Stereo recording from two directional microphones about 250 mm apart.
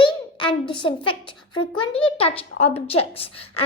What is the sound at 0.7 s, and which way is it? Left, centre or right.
A child's voice, centre.